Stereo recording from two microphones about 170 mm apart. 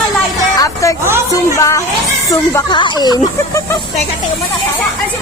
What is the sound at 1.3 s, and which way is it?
Music, 20° left (ahead or behind).